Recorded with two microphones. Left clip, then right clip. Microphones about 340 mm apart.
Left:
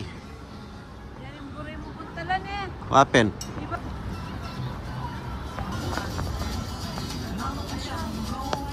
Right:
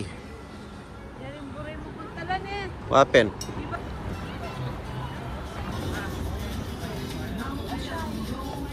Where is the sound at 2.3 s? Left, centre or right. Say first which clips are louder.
Left 2 dB; centre.